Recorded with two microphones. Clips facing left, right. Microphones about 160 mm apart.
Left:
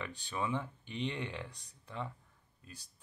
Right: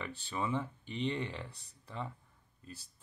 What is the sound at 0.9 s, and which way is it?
Speech, 10° left (ahead or behind).